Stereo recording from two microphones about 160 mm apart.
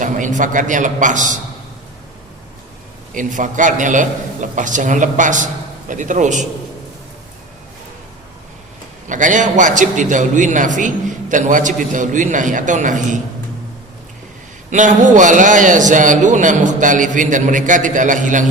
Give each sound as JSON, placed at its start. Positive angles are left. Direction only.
{"t": 0.0, "sound": "a man's voice", "side_deg": -50}
{"t": 3.2, "sound": "a man's voice", "side_deg": -55}
{"t": 9.0, "sound": "a man's voice", "side_deg": -50}
{"t": 14.7, "sound": "a man's voice", "side_deg": -50}